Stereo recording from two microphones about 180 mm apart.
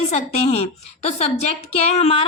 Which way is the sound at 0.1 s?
35° left (ahead or behind).